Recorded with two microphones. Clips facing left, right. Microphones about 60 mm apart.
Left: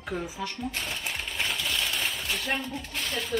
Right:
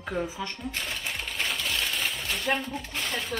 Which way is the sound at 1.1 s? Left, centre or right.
Centre.